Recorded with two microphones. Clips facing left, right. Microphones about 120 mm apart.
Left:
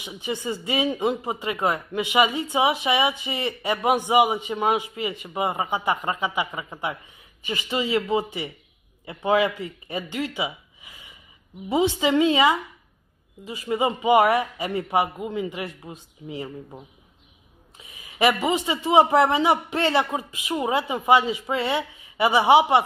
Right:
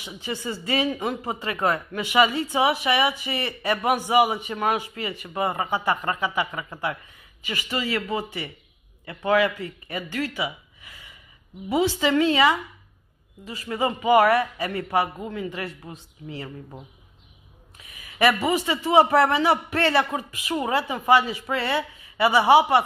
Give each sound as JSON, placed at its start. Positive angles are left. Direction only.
{"t": 0.0, "sound": "a man's voice", "side_deg": 20}
{"t": 17.7, "sound": "a man's voice", "side_deg": 20}